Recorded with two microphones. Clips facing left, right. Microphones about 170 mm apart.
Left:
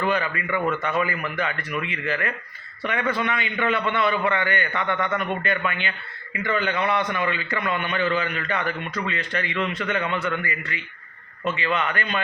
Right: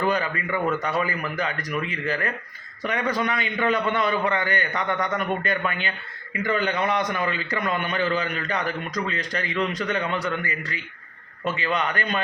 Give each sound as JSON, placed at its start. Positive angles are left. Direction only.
{"t": 0.1, "sound": "a man's voice", "side_deg": -40}